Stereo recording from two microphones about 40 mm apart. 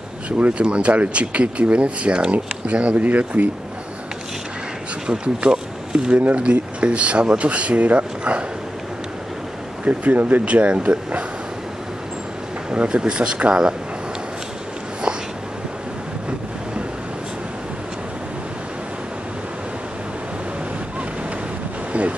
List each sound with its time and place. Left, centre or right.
0.6 s speech: right
5.0 s speech: right
5.5 s a sound: right
6.1 s speech: right
9.8 s speech: right
12.7 s speech: right